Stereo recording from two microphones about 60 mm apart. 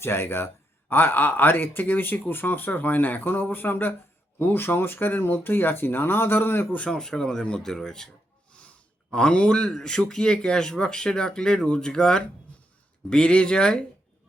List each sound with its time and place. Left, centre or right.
0.0 s speech: left
6.7 s speech: centre
8.5 s sigh: left
9.1 s speech: centre